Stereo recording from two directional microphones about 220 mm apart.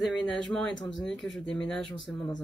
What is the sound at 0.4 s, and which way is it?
Speech, centre (ahead or behind).